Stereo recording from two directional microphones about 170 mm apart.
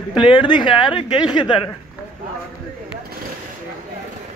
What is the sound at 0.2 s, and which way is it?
A woman's voice, 30° left (ahead or behind).